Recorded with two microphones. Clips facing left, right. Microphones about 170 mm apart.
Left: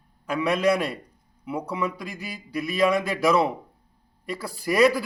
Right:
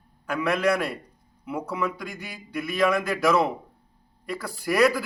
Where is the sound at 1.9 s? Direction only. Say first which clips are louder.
Left 1 dB; centre (ahead or behind).